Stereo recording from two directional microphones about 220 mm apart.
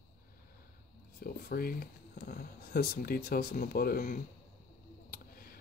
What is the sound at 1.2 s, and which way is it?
Speech, 40° left (ahead or behind).